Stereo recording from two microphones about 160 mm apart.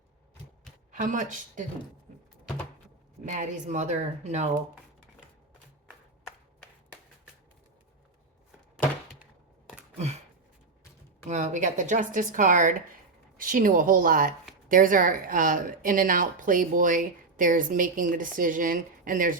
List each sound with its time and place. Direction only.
0.9 s a woman's voice: 55° right (ahead or behind)
3.2 s a woman's voice: 50° right (ahead or behind)
11.3 s a woman's voice: 50° right (ahead or behind)